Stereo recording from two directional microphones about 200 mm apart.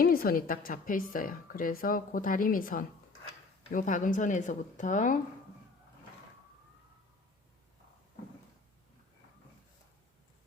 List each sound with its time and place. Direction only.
0.0 s a woman's voice: 45° left (ahead or behind)